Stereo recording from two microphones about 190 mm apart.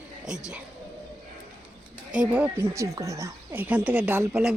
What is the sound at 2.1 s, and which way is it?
Speech, 5° right (ahead or behind).